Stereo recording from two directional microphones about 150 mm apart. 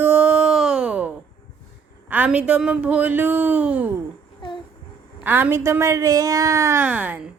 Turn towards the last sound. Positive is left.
turn(degrees=-10)  # may be behind; listen again after turning